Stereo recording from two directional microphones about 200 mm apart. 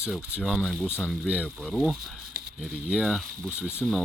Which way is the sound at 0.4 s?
Centre (ahead or behind).